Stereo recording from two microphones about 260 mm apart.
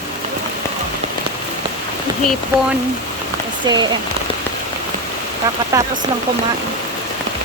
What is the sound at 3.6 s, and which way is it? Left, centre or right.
Speech, centre.